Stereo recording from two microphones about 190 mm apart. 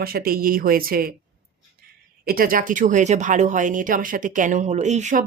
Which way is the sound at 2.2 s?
50° right (ahead or behind).